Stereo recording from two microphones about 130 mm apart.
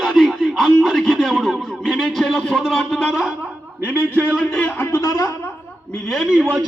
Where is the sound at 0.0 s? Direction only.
Centre (ahead or behind).